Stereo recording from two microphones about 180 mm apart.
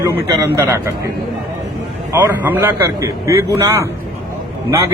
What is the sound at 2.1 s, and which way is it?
A man's voice, 10° right (ahead or behind).